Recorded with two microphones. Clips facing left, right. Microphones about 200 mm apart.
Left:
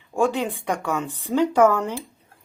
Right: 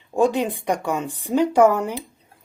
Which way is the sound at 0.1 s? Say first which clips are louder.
Right 3 dB; 20° right (ahead or behind).